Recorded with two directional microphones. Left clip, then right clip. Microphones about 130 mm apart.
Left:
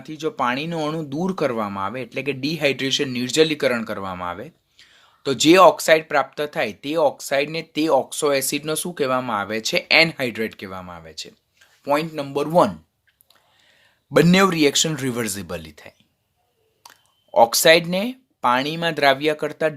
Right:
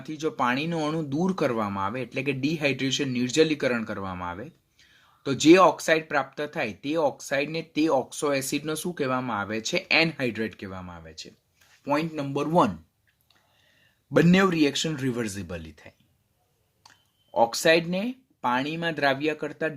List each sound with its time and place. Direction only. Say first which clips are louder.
0.0 s speech: left 3 dB; 15° left (ahead or behind)
14.1 s speech: left 5 dB; 40° left (ahead or behind)
17.3 s speech: left 7 dB; 45° left (ahead or behind)